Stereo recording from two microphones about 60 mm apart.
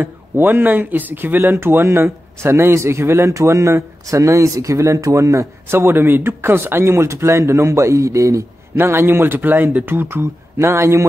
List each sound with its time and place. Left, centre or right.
0.0 s a man's voice: right
8.7 s speech: right